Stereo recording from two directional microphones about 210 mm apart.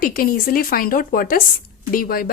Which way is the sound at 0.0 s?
45° left (ahead or behind).